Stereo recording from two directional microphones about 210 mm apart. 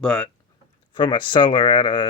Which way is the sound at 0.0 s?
5° left (ahead or behind).